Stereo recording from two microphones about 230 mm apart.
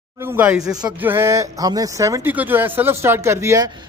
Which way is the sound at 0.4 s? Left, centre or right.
Centre.